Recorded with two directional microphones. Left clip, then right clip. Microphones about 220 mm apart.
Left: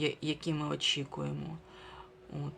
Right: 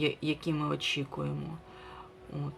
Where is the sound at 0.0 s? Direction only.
Centre (ahead or behind).